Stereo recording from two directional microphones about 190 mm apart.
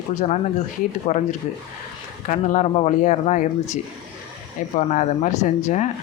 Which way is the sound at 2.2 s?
40° left (ahead or behind).